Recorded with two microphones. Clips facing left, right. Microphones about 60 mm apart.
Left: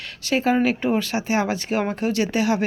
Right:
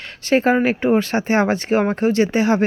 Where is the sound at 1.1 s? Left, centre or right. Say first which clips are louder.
Right 5 dB; right.